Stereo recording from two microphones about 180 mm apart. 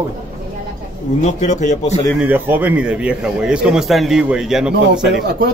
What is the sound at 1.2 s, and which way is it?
Speech, 40° left (ahead or behind).